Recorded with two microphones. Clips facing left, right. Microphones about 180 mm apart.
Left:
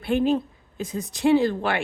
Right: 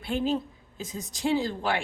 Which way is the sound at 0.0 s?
60° left (ahead or behind).